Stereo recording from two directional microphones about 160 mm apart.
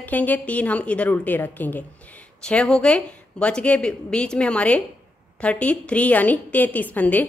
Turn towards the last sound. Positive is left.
turn(degrees=10)  # may be behind; listen again after turning